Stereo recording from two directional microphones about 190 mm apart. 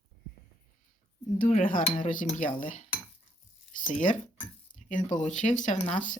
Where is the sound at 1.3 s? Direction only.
45° left (ahead or behind).